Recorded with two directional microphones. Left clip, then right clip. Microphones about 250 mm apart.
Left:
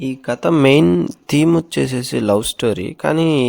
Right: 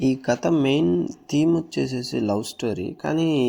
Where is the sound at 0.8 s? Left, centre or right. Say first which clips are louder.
Left 7 dB; left.